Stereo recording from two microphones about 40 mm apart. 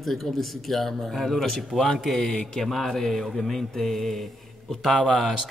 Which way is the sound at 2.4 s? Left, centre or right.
Centre.